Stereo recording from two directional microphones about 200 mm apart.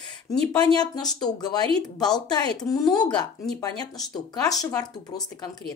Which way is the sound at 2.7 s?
20° left (ahead or behind).